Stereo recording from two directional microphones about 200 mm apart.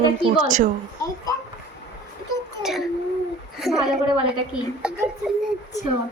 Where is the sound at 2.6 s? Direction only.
Centre (ahead or behind).